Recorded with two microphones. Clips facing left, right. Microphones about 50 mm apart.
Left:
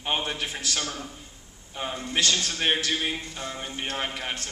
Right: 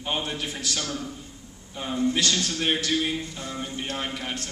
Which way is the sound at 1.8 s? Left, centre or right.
Left.